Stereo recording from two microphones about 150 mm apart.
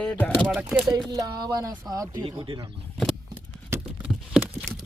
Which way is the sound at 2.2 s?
35° right (ahead or behind).